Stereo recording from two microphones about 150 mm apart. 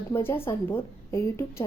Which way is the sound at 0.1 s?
15° left (ahead or behind).